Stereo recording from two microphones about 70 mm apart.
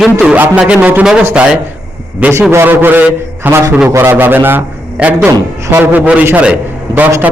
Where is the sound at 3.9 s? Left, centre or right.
Right.